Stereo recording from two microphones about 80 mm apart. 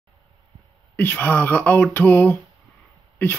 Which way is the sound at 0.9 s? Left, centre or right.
Left.